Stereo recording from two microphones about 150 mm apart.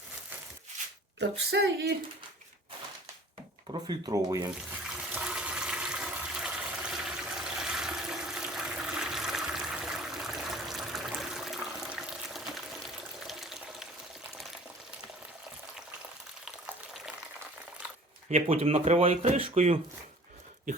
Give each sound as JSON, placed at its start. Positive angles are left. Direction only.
{"t": 1.5, "sound": "speech", "side_deg": -90}
{"t": 3.7, "sound": "speech", "side_deg": -30}
{"t": 4.9, "sound": "toilet flush", "side_deg": -5}
{"t": 13.1, "sound": "water", "side_deg": 0}
{"t": 16.5, "sound": "water", "side_deg": -5}
{"t": 18.3, "sound": "speech", "side_deg": -45}